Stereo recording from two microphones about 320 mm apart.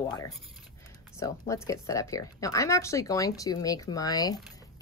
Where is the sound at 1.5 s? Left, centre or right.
Centre.